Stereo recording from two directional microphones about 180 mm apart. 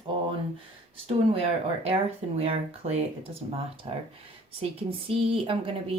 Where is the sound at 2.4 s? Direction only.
35° right (ahead or behind).